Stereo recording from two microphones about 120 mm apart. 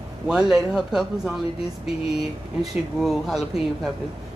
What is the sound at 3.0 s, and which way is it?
Speech, centre (ahead or behind).